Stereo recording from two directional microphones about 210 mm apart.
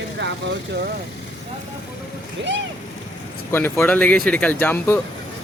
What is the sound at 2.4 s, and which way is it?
Speech, 60° right (ahead or behind).